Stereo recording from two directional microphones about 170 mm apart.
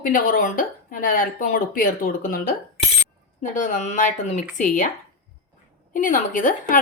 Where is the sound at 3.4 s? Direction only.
45° left (ahead or behind).